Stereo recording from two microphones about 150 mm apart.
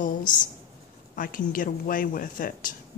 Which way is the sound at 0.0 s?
60° left (ahead or behind).